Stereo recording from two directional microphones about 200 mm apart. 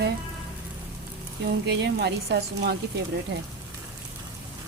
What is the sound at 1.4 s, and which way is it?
A woman's voice, 55° right (ahead or behind).